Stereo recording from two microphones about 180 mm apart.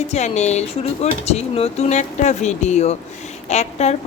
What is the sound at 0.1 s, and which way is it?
A woman's voice, 40° left (ahead or behind).